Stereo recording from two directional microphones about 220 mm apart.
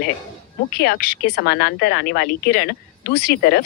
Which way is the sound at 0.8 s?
45° left (ahead or behind).